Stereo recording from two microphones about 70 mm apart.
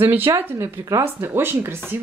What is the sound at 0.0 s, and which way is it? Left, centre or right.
Speech, right.